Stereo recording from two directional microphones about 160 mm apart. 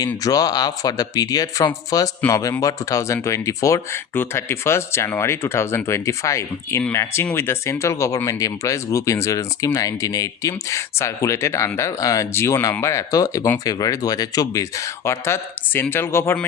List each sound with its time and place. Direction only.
0.3 s speech: 25° left (ahead or behind)